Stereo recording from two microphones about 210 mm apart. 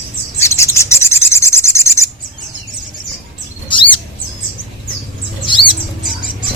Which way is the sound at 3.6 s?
25° left (ahead or behind).